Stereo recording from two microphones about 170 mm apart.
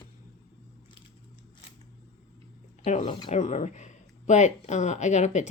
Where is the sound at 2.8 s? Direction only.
40° left (ahead or behind).